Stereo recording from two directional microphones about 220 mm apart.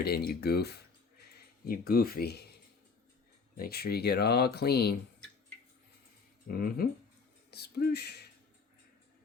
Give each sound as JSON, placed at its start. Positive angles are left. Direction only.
{"t": 0.0, "sound": "speech", "side_deg": 45}
{"t": 3.6, "sound": "speech", "side_deg": 45}
{"t": 6.5, "sound": "speech", "side_deg": 40}